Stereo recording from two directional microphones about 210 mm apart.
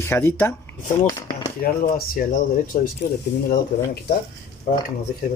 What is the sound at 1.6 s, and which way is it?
Speech, 40° left (ahead or behind).